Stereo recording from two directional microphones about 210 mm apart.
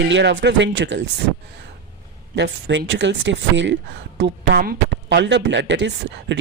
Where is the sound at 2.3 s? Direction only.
60° right (ahead or behind).